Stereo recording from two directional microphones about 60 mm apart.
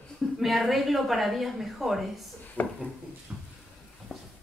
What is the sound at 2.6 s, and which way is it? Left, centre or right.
Speech, left.